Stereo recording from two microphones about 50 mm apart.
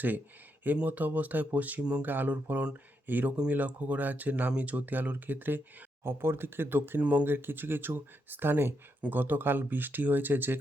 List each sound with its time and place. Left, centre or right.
0.9 s speech: right
6.0 s speech: right
7.0 s speech: right
7.3 s speech: right